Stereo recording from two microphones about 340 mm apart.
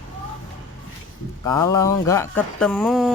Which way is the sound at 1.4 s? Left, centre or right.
Centre.